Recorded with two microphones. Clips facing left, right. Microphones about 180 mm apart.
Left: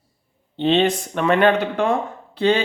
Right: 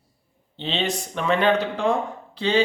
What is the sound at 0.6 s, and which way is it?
Speech, 55° left (ahead or behind).